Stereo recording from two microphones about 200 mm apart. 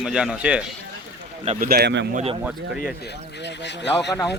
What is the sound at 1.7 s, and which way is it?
Speech, 55° right (ahead or behind).